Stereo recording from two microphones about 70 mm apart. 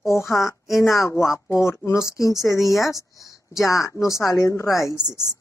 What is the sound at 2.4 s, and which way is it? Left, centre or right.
Speech, left.